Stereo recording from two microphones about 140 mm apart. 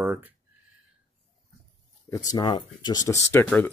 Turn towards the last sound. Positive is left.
turn(degrees=20)  # may be behind; listen again after turning